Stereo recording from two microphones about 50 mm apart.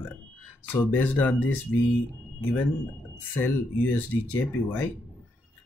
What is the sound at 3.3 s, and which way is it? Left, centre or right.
Speech, left.